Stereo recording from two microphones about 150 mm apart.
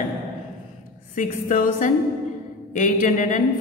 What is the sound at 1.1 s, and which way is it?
A woman's voice, 60° left (ahead or behind).